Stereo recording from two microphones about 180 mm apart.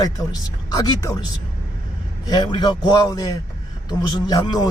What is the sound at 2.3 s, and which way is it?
Speech, 25° left (ahead or behind).